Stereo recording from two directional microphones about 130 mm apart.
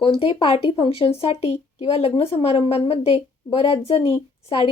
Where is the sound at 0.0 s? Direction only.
45° left (ahead or behind).